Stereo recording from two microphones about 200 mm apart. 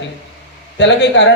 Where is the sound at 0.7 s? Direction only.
60° left (ahead or behind).